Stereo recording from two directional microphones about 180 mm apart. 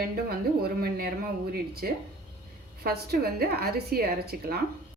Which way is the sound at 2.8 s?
60° right (ahead or behind).